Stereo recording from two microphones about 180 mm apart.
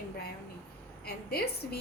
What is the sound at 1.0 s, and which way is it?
Speech, 60° left (ahead or behind).